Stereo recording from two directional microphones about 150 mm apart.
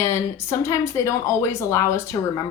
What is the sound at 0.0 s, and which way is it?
A woman's voice, 20° left (ahead or behind).